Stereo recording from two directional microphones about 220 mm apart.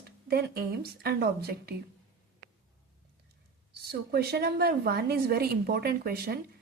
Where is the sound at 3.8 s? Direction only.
45° right (ahead or behind).